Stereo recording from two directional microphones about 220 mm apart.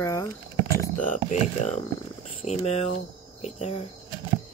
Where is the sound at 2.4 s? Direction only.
30° left (ahead or behind).